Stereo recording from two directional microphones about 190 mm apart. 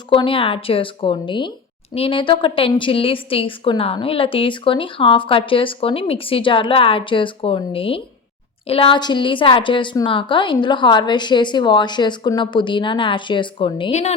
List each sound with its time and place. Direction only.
0.1 s a woman's voice: 30° left (ahead or behind)